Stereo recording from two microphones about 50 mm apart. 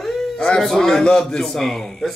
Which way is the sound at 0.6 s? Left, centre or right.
Centre.